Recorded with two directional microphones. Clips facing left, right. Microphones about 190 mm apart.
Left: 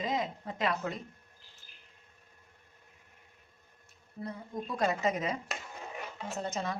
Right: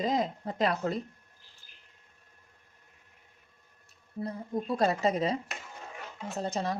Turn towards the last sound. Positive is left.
turn(degrees=-35)  # may be behind; listen again after turning